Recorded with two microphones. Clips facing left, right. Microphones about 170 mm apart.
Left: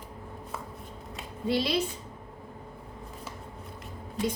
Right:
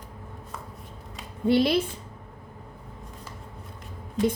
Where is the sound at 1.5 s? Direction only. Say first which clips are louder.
Right 6 dB; 55° right (ahead or behind).